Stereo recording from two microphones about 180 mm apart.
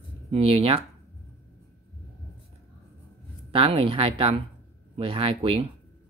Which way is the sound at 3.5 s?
30° right (ahead or behind).